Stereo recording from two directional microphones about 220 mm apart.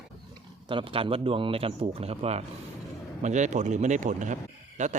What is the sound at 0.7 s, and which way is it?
A man's voice, 25° right (ahead or behind).